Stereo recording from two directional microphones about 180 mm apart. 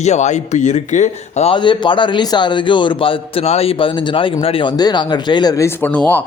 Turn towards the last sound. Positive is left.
turn(degrees=10)  # may be behind; listen again after turning